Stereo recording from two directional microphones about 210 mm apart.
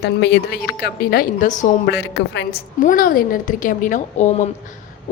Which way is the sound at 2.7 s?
40° left (ahead or behind).